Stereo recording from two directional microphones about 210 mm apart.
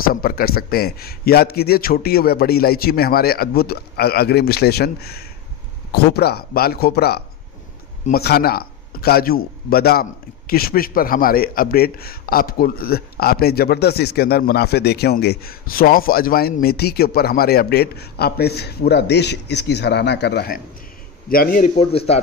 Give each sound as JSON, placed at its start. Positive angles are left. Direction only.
{"t": 0.1, "sound": "a man's voice", "side_deg": 45}